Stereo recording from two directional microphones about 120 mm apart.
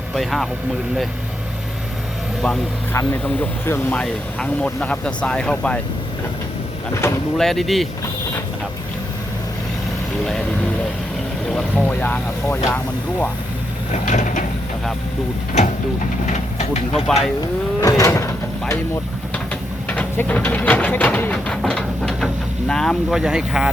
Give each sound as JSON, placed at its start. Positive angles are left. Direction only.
{"t": 0.1, "sound": "speech", "side_deg": 0}
{"t": 2.9, "sound": "speech", "side_deg": 20}
{"t": 6.9, "sound": "speech", "side_deg": 25}
{"t": 7.3, "sound": "speech", "side_deg": 5}
{"t": 11.8, "sound": "speech", "side_deg": 15}
{"t": 13.9, "sound": "a sound", "side_deg": 85}
{"t": 15.6, "sound": "speech", "side_deg": 75}
{"t": 16.9, "sound": "speech", "side_deg": 5}
{"t": 17.7, "sound": "drawer open or close", "side_deg": 25}
{"t": 19.9, "sound": "speech", "side_deg": 10}